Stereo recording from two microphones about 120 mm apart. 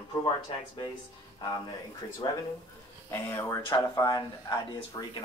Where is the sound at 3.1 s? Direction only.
20° left (ahead or behind).